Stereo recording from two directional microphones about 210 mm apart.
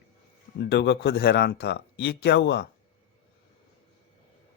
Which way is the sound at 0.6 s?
55° left (ahead or behind).